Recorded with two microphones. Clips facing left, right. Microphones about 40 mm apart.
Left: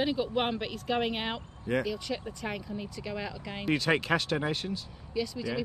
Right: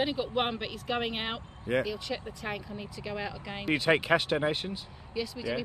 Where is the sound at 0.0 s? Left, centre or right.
Centre.